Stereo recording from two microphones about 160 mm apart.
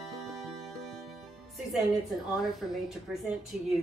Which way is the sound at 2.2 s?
Centre (ahead or behind).